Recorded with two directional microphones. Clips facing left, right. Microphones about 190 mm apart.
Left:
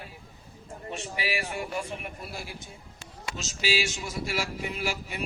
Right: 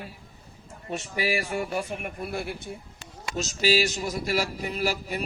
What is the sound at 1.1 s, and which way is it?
Speech, 40° right (ahead or behind).